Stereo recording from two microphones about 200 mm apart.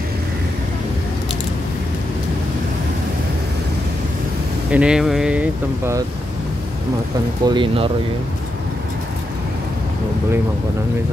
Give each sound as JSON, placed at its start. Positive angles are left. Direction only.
{"t": 4.6, "sound": "speech", "side_deg": -5}
{"t": 7.4, "sound": "speech", "side_deg": -25}